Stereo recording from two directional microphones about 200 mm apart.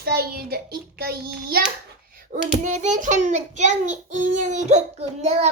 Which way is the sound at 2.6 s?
35° right (ahead or behind).